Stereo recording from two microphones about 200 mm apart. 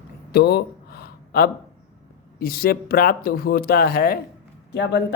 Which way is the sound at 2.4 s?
50° left (ahead or behind).